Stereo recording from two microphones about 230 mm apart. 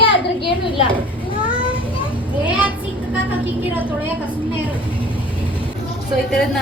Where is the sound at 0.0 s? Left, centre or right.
Left.